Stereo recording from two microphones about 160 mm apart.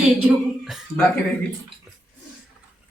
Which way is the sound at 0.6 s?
Centre (ahead or behind).